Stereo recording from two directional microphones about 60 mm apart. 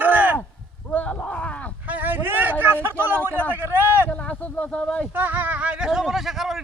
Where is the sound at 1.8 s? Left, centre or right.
Right.